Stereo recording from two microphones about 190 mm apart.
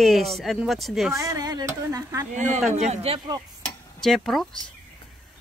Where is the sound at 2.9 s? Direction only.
30° right (ahead or behind).